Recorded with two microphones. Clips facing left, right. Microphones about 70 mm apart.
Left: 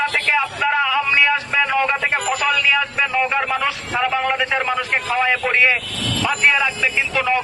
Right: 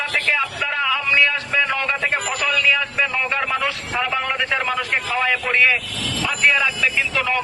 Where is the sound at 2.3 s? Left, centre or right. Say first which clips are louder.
Left 2 dB; centre.